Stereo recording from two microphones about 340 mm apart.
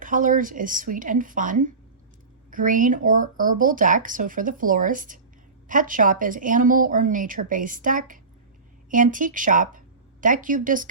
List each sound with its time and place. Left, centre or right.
0.0 s a woman's voice: right